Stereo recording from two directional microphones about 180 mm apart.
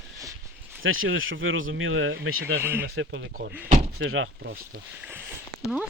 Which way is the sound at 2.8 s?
90° right.